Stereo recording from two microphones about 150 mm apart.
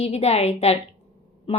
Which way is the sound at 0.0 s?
45° left (ahead or behind).